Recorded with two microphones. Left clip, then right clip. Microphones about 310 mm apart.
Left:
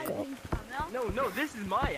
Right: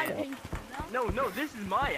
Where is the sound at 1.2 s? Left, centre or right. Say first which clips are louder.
Even; centre.